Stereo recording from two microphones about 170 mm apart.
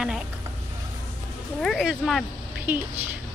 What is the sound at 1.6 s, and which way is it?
Speech, centre (ahead or behind).